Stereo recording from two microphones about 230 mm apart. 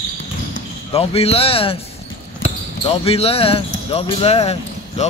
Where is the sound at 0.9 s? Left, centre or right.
Left.